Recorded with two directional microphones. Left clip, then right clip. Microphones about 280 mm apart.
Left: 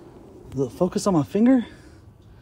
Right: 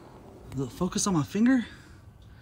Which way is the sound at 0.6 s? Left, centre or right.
Centre.